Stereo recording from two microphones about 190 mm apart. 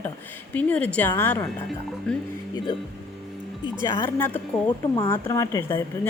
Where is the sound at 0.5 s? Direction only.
5° left (ahead or behind).